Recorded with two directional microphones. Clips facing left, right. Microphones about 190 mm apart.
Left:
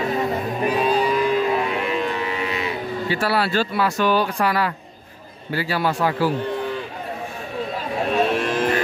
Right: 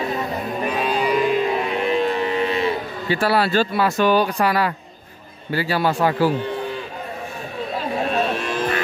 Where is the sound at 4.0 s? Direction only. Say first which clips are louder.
Right 3 dB; 15° right (ahead or behind).